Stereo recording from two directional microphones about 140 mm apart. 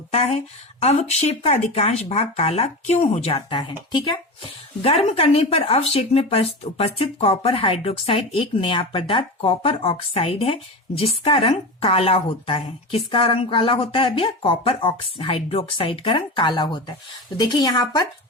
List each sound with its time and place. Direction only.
0.1 s speech: 50° left (ahead or behind)
3.6 s speech: 35° left (ahead or behind)
4.8 s speech: 45° left (ahead or behind); by 18.1 s 30° left (ahead or behind)